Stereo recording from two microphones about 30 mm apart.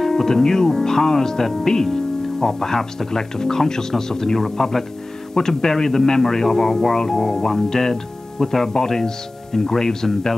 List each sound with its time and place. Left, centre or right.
0.0 s music: centre
0.3 s a man's voice: centre